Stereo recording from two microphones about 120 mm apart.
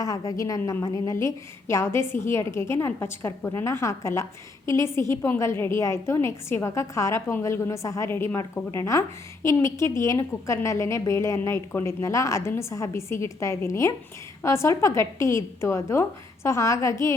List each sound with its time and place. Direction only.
0.0 s a woman's voice: 30° left (ahead or behind)